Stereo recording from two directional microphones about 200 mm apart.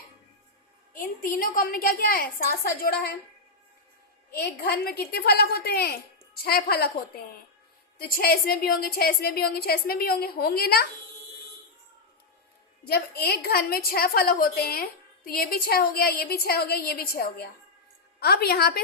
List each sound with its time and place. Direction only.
0.9 s a woman's voice: 45° left (ahead or behind)
4.3 s a woman's voice: 50° left (ahead or behind)
12.8 s a woman's voice: 50° left (ahead or behind)